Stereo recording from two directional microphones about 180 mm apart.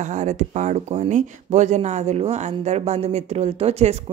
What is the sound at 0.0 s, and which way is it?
Speech, 40° right (ahead or behind).